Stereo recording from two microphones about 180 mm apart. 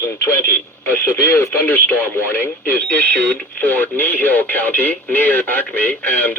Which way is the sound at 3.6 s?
10° left (ahead or behind).